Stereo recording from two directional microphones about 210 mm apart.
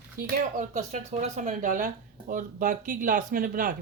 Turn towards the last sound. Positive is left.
turn(degrees=-40)  # may be behind; listen again after turning